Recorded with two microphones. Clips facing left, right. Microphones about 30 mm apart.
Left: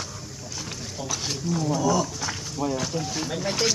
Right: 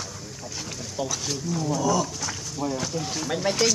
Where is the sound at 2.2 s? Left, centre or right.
Left.